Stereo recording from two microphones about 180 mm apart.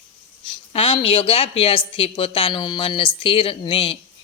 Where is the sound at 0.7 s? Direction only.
30° left (ahead or behind).